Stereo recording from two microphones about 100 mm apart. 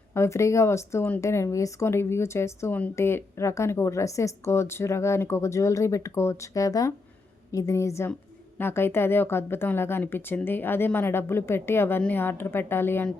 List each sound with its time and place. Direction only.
0.1 s a woman's voice: 30° left (ahead or behind)